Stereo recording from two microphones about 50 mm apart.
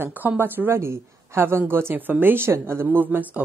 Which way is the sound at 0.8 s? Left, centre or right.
Right.